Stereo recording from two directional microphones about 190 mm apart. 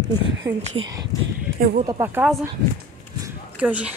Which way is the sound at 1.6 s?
55° right (ahead or behind).